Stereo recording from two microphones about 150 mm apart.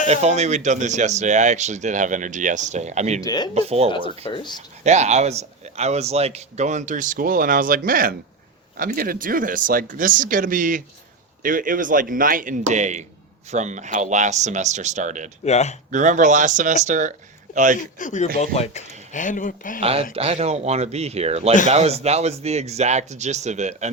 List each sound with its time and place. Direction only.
0.1 s speech: 50° right (ahead or behind)
3.2 s speech: 25° left (ahead or behind)
3.5 s speech: 45° right (ahead or behind)
4.2 s speech: 30° left (ahead or behind)
4.8 s speech: 50° right (ahead or behind)
15.4 s speech: 50° left (ahead or behind)
15.9 s speech: 55° right (ahead or behind)
18.0 s speech: 50° left (ahead or behind)
19.1 s speech: 60° left (ahead or behind)
19.8 s speech: 40° right (ahead or behind)